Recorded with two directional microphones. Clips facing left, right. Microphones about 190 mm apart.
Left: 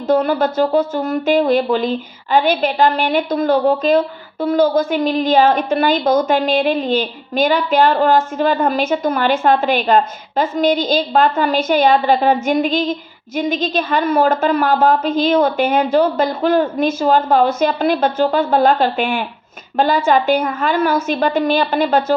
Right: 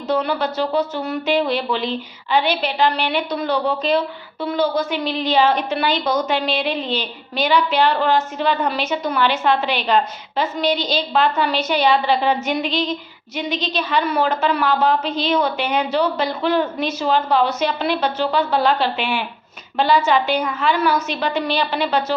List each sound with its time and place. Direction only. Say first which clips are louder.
0.1 s speech: left 6 dB; 50° left (ahead or behind)